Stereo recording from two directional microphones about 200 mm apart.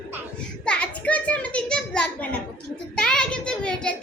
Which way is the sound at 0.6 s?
5° left (ahead or behind).